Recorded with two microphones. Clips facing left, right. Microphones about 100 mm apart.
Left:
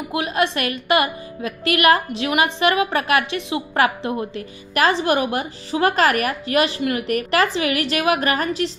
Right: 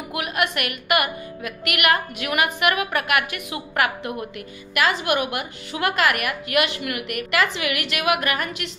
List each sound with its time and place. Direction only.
0.1 s a woman's voice: 30° left (ahead or behind)